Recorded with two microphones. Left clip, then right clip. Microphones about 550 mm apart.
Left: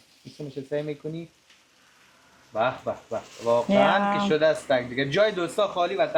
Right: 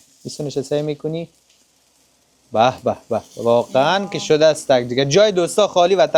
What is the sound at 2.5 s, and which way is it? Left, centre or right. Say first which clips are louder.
Speech: right 10 dB; right.